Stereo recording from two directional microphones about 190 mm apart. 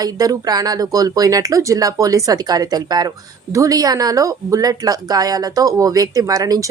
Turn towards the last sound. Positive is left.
turn(degrees=-20)  # may be behind; listen again after turning